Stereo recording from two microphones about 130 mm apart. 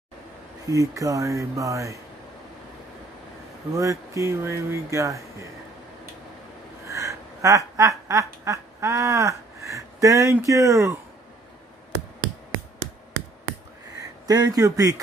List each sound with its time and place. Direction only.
0.7 s speech: 25° right (ahead or behind)
3.7 s speech: 25° right (ahead or behind)
6.9 s quack: 25° right (ahead or behind)
10.4 s speech: 25° right (ahead or behind)
14.2 s speech: 30° right (ahead or behind)